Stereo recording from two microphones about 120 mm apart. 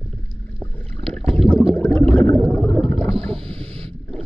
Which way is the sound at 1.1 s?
5° left (ahead or behind).